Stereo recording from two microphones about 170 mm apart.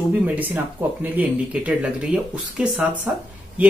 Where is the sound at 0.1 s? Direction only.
10° right (ahead or behind).